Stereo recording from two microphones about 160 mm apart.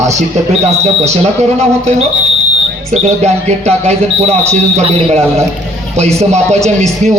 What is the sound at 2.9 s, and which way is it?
Speech, 45° right (ahead or behind).